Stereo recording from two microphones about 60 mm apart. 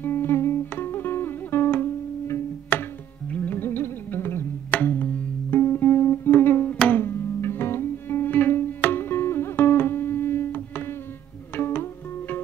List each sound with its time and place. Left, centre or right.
0.0 s music: left
2.7 s music: left
5.8 s music: left